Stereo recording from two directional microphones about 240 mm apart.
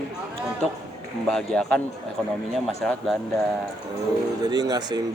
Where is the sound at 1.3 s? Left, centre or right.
Centre.